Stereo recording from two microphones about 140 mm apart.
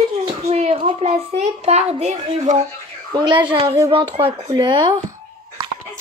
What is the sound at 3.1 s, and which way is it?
A woman's voice, 35° right (ahead or behind).